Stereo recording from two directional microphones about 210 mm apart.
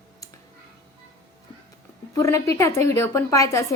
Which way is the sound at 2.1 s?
15° left (ahead or behind).